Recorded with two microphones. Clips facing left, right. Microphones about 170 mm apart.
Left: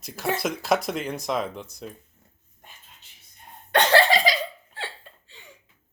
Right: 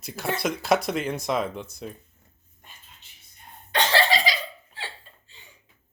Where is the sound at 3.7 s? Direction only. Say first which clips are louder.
Left 4 dB; 55° left (ahead or behind).